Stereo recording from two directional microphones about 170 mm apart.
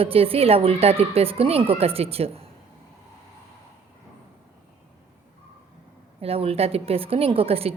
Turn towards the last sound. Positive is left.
turn(degrees=-35)  # may be behind; listen again after turning